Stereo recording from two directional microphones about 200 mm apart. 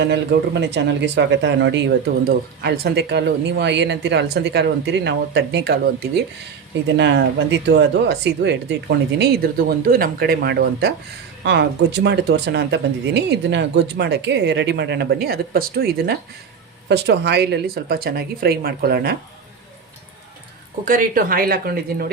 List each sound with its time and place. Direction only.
0.0 s speech: 60° right (ahead or behind)
20.8 s speech: 45° right (ahead or behind)